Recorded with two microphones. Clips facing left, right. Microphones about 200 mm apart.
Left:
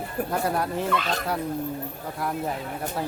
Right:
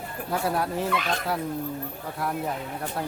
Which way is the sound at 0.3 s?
Centre (ahead or behind).